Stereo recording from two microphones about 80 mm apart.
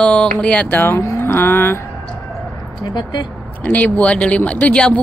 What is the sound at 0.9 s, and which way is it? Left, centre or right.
Speech, left.